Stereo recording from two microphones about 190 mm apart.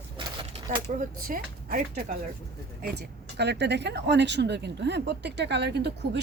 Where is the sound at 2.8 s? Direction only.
60° right (ahead or behind).